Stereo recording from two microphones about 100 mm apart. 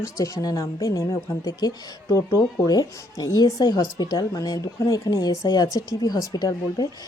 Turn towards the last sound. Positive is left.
turn(degrees=40)  # may be behind; listen again after turning